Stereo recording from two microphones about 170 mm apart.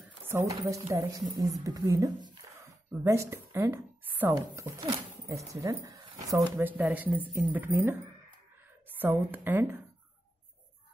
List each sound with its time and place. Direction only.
0.3 s a woman's voice: 20° right (ahead or behind)
9.0 s a woman's voice: 10° right (ahead or behind)